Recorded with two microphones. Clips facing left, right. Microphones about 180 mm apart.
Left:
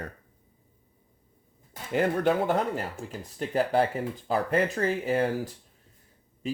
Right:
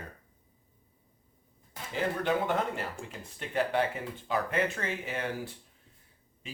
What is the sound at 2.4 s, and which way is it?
Speech, 40° left (ahead or behind).